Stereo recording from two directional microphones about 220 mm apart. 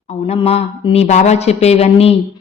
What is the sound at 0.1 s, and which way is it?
Speech, 25° left (ahead or behind).